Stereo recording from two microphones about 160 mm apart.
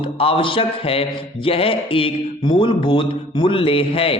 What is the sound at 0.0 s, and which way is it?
Speech, 35° left (ahead or behind).